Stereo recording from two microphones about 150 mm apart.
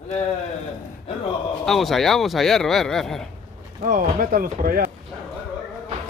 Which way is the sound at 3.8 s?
60° right (ahead or behind).